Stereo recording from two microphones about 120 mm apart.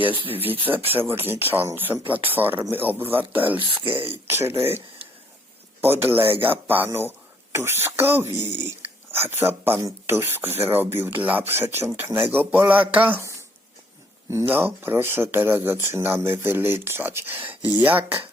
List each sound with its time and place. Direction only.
0.9 s speech: 15° right (ahead or behind)
3.6 s speech: 45° right (ahead or behind)
4.3 s speech: 20° right (ahead or behind)
5.8 s speech: 20° right (ahead or behind)
14.3 s speech: 20° right (ahead or behind)